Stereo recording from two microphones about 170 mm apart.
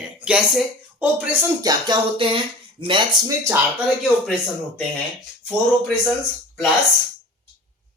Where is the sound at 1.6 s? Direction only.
25° right (ahead or behind).